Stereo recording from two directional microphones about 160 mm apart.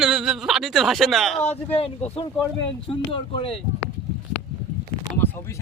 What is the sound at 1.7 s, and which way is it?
Speech, 35° left (ahead or behind).